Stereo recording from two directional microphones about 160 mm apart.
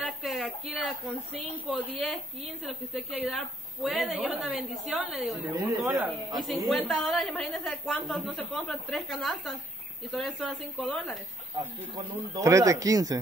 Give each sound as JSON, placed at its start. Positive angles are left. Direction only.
{"t": 0.2, "sound": "a sound", "side_deg": 0}
{"t": 1.7, "sound": "a woman's voice", "side_deg": 5}
{"t": 3.3, "sound": "a woman's voice", "side_deg": 5}
{"t": 5.6, "sound": "speech", "side_deg": -15}
{"t": 6.4, "sound": "a woman's voice", "side_deg": 0}
{"t": 12.4, "sound": "speech", "side_deg": -20}